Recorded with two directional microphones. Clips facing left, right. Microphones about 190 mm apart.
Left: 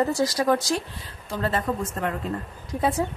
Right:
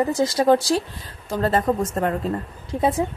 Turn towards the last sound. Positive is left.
turn(degrees=-20)  # may be behind; listen again after turning